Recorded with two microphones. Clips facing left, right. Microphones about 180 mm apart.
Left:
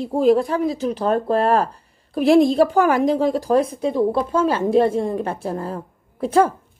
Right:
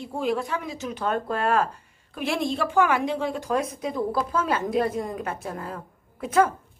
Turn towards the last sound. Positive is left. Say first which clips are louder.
# left 4 dB
turn(degrees=30)  # may be behind; listen again after turning